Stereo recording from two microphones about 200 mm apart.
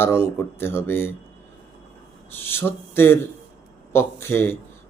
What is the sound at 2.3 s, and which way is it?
Speech, 10° left (ahead or behind).